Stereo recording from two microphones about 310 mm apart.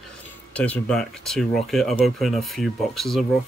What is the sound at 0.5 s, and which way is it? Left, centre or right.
Speech, centre.